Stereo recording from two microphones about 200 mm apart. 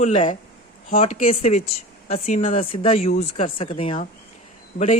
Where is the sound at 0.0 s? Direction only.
35° left (ahead or behind).